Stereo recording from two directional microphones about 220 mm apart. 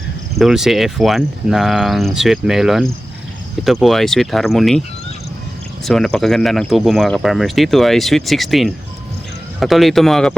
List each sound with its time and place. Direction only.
0.3 s speech: centre (ahead or behind)
5.8 s speech: centre (ahead or behind)